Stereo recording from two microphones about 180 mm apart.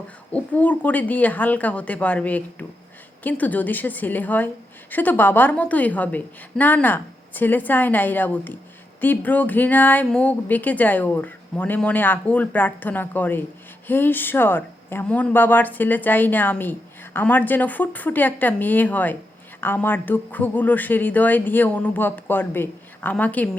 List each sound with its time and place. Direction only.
0.3 s speech: 10° left (ahead or behind)